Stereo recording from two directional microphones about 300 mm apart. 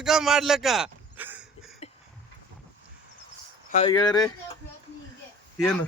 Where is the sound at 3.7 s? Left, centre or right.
Left.